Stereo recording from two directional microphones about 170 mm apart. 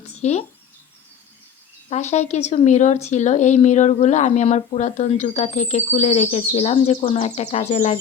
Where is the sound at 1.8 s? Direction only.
40° left (ahead or behind).